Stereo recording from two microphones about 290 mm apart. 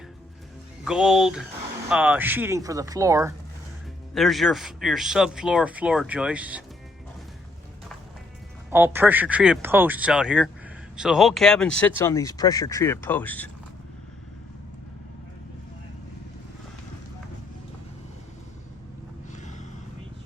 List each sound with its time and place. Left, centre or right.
0.9 s speech: centre
4.1 s speech: centre
8.7 s speech: centre
19.3 s a sound: left